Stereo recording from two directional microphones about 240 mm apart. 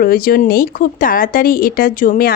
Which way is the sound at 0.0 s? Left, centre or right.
Left.